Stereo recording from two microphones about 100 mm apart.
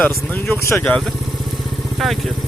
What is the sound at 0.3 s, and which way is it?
Speech, 15° left (ahead or behind).